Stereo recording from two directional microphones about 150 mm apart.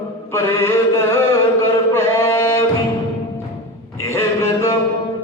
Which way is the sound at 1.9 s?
15° left (ahead or behind).